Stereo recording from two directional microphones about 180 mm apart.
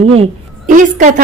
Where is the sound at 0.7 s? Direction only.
45° right (ahead or behind).